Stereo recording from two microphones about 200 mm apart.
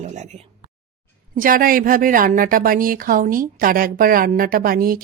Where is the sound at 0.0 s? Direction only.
35° right (ahead or behind).